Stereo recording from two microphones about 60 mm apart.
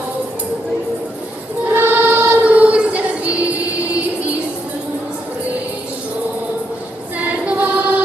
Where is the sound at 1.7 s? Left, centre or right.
Right.